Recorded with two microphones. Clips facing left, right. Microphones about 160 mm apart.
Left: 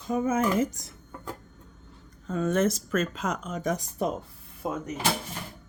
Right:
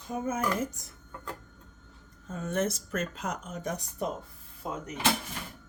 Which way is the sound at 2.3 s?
90° left.